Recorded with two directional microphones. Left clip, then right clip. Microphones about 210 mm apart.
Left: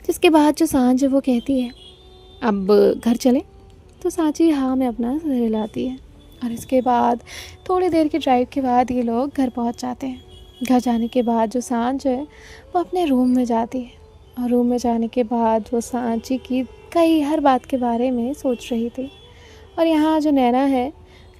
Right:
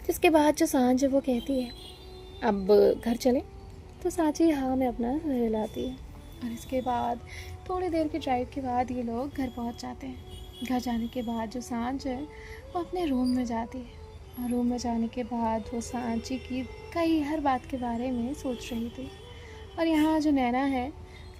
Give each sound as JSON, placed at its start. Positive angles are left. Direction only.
{"t": 0.1, "sound": "a woman's voice", "side_deg": 45}